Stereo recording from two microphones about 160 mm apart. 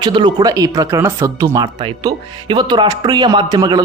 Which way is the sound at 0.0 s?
30° right (ahead or behind).